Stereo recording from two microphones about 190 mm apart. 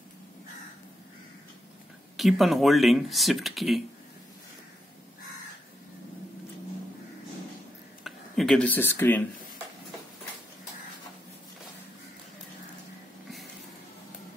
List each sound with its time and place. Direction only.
2.1 s speech: centre (ahead or behind)
8.0 s speech: centre (ahead or behind)